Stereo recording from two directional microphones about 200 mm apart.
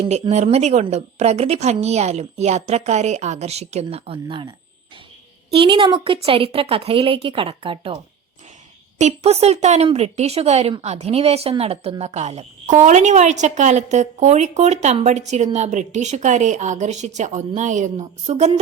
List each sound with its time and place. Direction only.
0.0 s a woman's voice: 35° right (ahead or behind)